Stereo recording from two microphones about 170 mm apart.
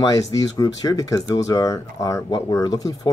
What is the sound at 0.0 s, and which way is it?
Speech, 20° left (ahead or behind).